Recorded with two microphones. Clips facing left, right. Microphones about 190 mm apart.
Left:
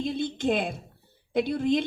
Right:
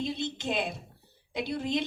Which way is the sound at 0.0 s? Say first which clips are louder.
Left 5 dB; 55° left (ahead or behind).